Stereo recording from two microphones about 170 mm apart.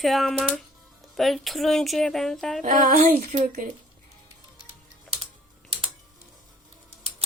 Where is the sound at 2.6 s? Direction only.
50° right (ahead or behind).